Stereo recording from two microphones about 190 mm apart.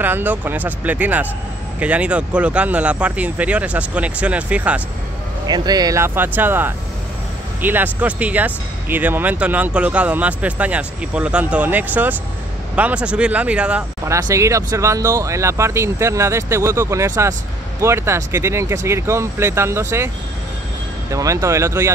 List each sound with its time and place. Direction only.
0.0 s speech: 10° right (ahead or behind)
5.5 s speech: 20° right (ahead or behind)
21.1 s speech: 15° right (ahead or behind)